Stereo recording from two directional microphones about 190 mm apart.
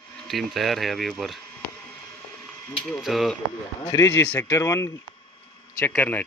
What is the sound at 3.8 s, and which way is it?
Speech, 15° left (ahead or behind).